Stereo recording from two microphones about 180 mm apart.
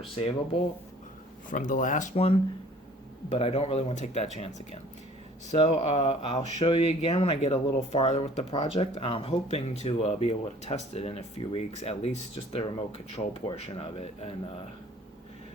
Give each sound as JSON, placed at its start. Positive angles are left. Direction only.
{"t": 0.2, "sound": "speech", "side_deg": 30}
{"t": 1.5, "sound": "speech", "side_deg": 45}